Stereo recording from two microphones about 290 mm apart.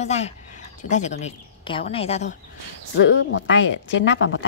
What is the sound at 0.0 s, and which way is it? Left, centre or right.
A woman's voice, left.